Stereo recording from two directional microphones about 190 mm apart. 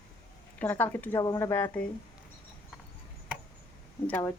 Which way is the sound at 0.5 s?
10° left (ahead or behind).